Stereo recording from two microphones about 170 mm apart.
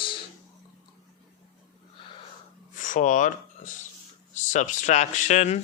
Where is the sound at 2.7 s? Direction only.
50° left (ahead or behind).